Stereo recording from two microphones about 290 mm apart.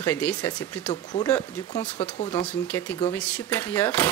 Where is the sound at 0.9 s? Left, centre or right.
Centre.